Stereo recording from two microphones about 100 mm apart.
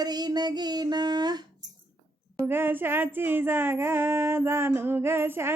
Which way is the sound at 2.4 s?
20° right (ahead or behind).